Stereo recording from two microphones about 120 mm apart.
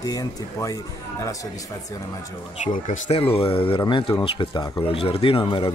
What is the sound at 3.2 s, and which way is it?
Speech, 50° left (ahead or behind).